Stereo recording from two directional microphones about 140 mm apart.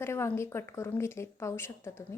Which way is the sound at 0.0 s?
20° left (ahead or behind).